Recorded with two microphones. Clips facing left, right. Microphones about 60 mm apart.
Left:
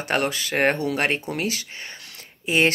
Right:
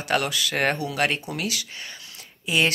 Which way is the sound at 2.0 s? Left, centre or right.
Left.